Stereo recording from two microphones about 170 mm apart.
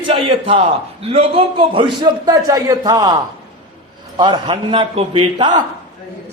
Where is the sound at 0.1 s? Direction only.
30° right (ahead or behind).